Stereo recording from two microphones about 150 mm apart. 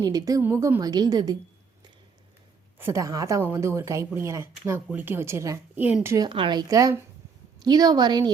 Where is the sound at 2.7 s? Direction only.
15° right (ahead or behind).